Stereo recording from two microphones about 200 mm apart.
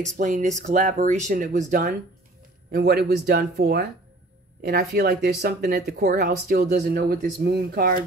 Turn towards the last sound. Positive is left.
turn(degrees=-50)  # may be behind; listen again after turning